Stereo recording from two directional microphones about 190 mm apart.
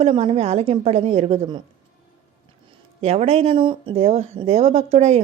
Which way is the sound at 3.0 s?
35° right (ahead or behind).